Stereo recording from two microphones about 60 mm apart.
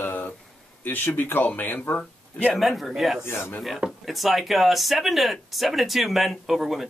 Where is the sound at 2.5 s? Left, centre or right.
Centre.